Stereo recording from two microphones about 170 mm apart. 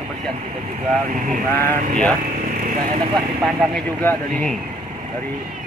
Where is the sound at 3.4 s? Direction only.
Centre (ahead or behind).